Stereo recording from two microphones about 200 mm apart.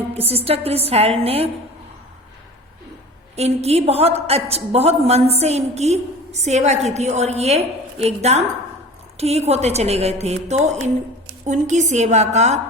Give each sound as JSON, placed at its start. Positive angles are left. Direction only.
{"t": 0.1, "sound": "a woman's voice", "side_deg": -30}
{"t": 3.3, "sound": "a woman's voice", "side_deg": -30}